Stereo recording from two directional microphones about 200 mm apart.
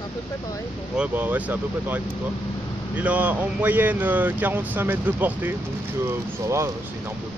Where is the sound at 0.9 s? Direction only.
10° right (ahead or behind).